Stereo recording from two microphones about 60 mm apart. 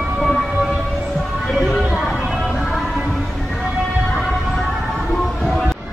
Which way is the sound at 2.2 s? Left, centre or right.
Centre.